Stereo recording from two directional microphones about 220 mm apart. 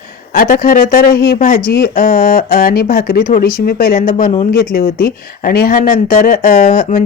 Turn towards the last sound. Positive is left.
turn(degrees=40)  # may be behind; listen again after turning